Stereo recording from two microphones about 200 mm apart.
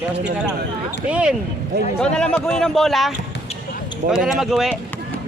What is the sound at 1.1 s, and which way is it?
A man's voice, 5° right (ahead or behind).